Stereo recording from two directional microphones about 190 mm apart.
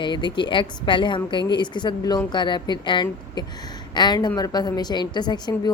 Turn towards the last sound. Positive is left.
turn(degrees=20)  # may be behind; listen again after turning